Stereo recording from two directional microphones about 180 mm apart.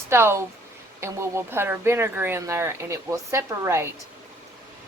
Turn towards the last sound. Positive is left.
turn(degrees=-15)  # may be behind; listen again after turning